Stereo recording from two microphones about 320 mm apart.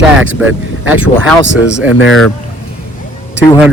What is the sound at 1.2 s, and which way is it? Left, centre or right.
A man's voice, centre.